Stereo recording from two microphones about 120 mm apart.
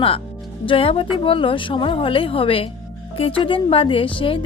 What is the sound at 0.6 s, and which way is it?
A woman's voice, 50° left (ahead or behind).